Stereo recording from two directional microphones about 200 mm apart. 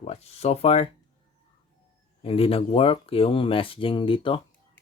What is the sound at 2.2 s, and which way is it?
Speech, 30° left (ahead or behind).